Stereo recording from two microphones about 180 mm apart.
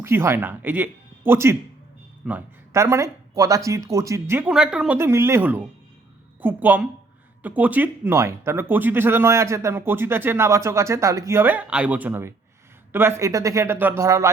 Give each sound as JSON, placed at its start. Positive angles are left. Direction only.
{"t": 0.0, "sound": "speech", "side_deg": -15}